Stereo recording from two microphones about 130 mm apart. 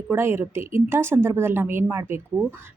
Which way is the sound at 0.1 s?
20° right (ahead or behind).